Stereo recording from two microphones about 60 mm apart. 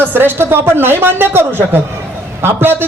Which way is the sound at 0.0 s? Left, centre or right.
Right.